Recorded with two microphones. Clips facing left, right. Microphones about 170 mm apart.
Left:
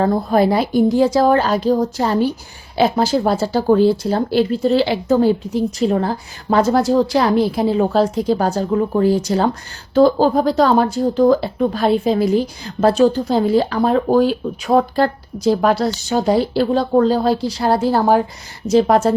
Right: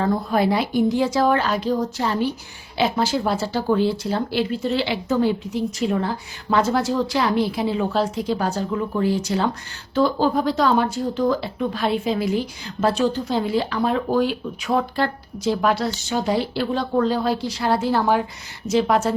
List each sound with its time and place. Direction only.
0.0 s speech: 40° left (ahead or behind)